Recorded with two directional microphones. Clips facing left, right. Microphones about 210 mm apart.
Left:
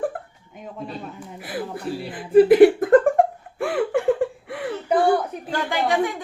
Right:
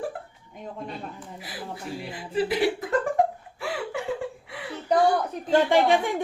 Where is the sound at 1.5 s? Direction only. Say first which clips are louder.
Left 8 dB; 55° left (ahead or behind).